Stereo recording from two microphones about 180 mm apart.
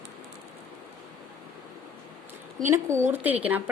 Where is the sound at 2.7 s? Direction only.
15° right (ahead or behind).